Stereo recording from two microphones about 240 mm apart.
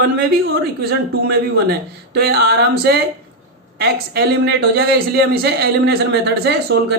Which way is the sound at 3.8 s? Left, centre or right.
Right.